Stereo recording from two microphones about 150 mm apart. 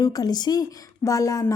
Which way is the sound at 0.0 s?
25° left (ahead or behind).